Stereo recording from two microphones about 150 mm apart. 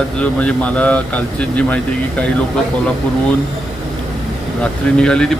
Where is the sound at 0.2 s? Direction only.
10° left (ahead or behind).